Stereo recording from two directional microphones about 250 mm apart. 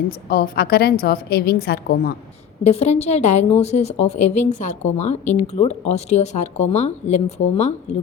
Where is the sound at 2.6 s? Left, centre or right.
Left.